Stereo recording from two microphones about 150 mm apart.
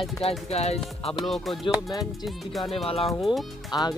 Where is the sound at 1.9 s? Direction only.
25° left (ahead or behind).